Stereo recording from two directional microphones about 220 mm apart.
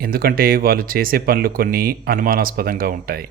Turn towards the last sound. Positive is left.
turn(degrees=-45)  # may be behind; listen again after turning